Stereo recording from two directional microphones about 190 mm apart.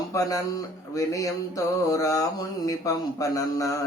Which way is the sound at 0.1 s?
15° left (ahead or behind).